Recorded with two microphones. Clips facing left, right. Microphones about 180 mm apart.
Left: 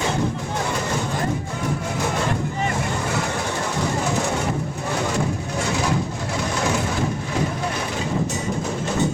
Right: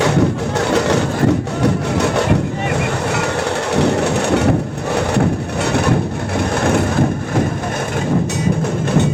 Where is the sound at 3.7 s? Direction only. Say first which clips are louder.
Right 9 dB; 70° right (ahead or behind).